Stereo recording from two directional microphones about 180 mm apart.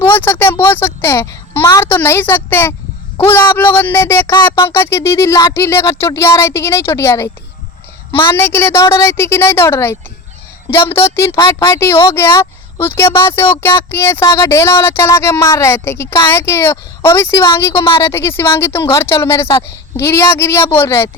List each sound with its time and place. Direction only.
0.0 s a sound: 10° left (ahead or behind)
1.6 s a woman's voice: 15° left (ahead or behind)
4.7 s speech: 15° left (ahead or behind)